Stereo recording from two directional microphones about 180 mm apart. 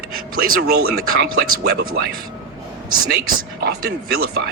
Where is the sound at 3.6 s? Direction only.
70° right (ahead or behind).